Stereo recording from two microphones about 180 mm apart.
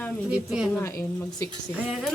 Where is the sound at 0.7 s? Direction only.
15° left (ahead or behind).